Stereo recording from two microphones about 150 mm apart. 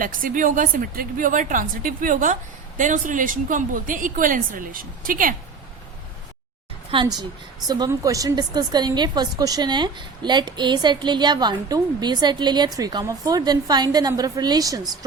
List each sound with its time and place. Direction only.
0.0 s a woman's voice: 65° right (ahead or behind)
6.9 s a woman's voice: 30° right (ahead or behind)